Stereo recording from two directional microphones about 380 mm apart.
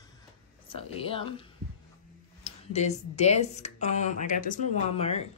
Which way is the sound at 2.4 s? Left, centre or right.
Centre.